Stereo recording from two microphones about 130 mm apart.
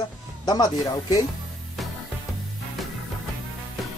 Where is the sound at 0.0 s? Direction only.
30° left (ahead or behind).